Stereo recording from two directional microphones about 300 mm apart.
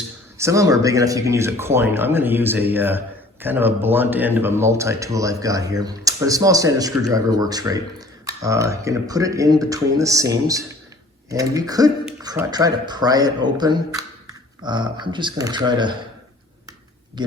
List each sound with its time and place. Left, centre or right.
0.3 s speech: centre
17.2 s speech: centre